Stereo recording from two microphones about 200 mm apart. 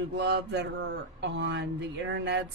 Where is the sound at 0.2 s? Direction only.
60° right (ahead or behind).